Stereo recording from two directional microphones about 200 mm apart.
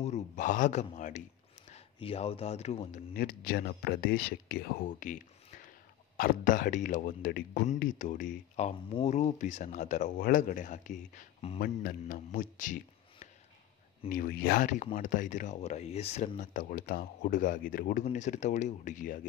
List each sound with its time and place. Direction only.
0.0 s speech: 35° left (ahead or behind)
11.6 s a man's voice: 45° left (ahead or behind)
14.0 s speech: 45° left (ahead or behind)